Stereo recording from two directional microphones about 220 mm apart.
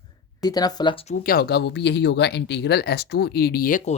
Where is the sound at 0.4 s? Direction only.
15° left (ahead or behind).